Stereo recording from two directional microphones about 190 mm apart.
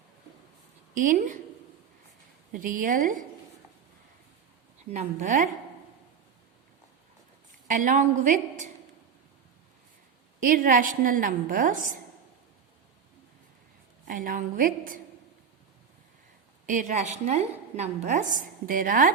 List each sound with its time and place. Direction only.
0.9 s a woman's voice: 45° right (ahead or behind)
2.5 s a woman's voice: 45° right (ahead or behind)
4.9 s a woman's voice: 40° right (ahead or behind)
7.7 s a woman's voice: 45° right (ahead or behind)
10.4 s a woman's voice: 45° right (ahead or behind)
14.0 s a woman's voice: 45° right (ahead or behind)
16.6 s a woman's voice: 40° right (ahead or behind)